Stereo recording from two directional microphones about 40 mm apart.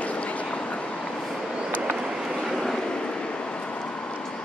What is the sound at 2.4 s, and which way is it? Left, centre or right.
Vehicle, centre.